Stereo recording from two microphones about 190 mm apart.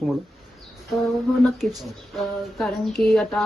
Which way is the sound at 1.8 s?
Centre (ahead or behind).